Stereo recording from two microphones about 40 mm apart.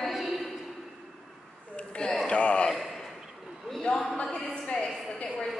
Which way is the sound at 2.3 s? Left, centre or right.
Left.